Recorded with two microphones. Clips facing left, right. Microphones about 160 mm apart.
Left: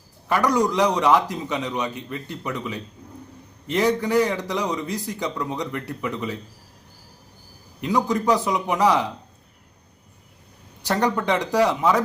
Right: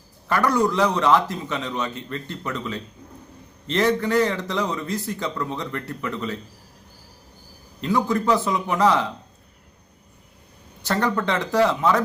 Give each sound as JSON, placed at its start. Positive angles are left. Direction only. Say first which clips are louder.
{"t": 0.3, "sound": "a man's voice", "louder": "even", "side_deg": 15}
{"t": 7.8, "sound": "a man's voice", "louder": "even", "side_deg": 15}
{"t": 10.8, "sound": "a man's voice", "louder": "left 1 dB", "side_deg": 15}